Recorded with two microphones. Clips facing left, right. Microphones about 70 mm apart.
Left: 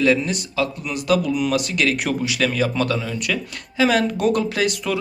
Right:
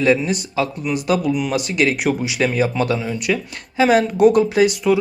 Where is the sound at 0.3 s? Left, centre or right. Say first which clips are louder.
Right 2 dB; right.